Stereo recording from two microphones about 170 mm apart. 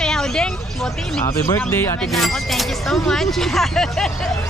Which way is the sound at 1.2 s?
15° left (ahead or behind).